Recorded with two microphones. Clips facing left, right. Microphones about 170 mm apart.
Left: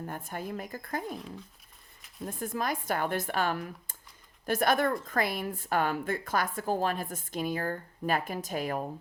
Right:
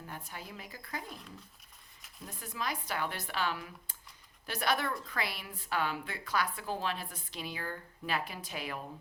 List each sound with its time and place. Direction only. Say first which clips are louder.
0.0 s a woman's voice: left 8 dB; 50° left (ahead or behind)
2.2 s a woman's voice: left 7 dB; 50° left (ahead or behind)